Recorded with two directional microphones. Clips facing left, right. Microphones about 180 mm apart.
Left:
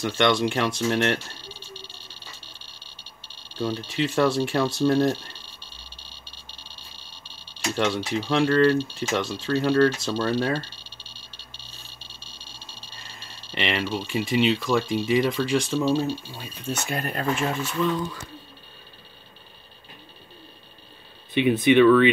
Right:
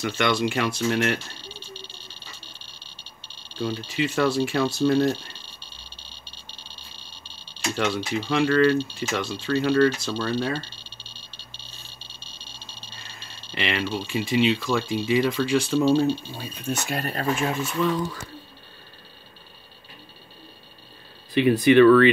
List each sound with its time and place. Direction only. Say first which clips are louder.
0.0 s speech: left 2 dB; 5° right (ahead or behind)
1.0 s a sound: left 1 dB; centre (ahead or behind)
3.5 s speech: even; centre (ahead or behind)
7.7 s speech: left 1 dB; centre (ahead or behind)
12.4 s a sound: right 1 dB; 25° right (ahead or behind)
13.5 s speech: even; centre (ahead or behind)
16.1 s speech: right 4 dB; 20° right (ahead or behind)
16.7 s speech: even; centre (ahead or behind)
21.3 s speech: right 1 dB; centre (ahead or behind)